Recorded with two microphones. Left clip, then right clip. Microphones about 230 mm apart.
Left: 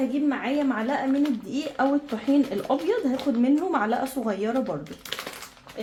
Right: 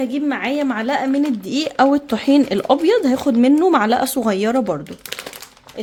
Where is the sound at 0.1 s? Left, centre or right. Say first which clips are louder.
Right 5 dB; right.